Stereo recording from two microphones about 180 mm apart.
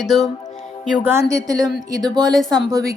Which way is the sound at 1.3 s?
20° right (ahead or behind).